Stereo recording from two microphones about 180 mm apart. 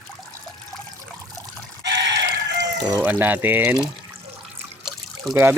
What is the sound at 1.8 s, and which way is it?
Chicken, 75° right (ahead or behind).